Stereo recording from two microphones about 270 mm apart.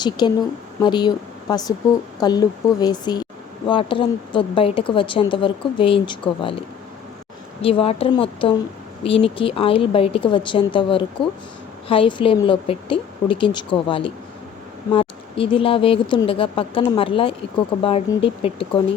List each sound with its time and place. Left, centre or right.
0.0 s speech: centre
7.6 s speech: left